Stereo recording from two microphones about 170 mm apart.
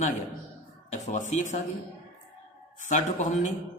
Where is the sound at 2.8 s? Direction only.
45° left (ahead or behind).